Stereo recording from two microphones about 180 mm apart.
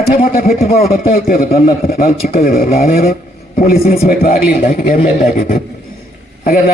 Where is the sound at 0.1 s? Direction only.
50° left (ahead or behind).